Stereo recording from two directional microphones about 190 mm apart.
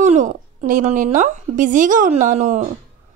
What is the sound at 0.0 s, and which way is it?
A woman's voice, 40° right (ahead or behind).